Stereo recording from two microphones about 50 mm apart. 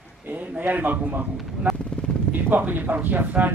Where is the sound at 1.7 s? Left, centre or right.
Right.